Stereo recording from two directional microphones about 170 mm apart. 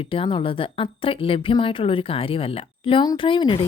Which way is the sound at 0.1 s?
35° left (ahead or behind).